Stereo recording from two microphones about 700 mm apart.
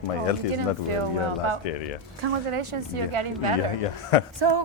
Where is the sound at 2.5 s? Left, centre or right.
Right.